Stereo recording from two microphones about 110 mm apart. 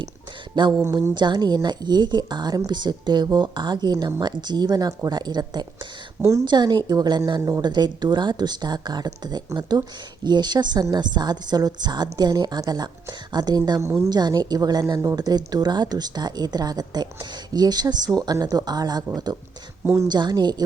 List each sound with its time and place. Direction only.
0.9 s a woman's voice: 25° right (ahead or behind)
1.1 s a woman's voice: 45° right (ahead or behind)